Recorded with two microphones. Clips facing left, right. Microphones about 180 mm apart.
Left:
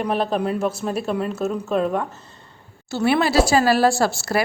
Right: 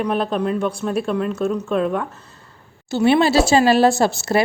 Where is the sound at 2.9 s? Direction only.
20° right (ahead or behind).